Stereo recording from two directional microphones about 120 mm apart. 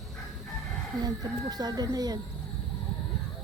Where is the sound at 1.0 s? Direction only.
35° right (ahead or behind).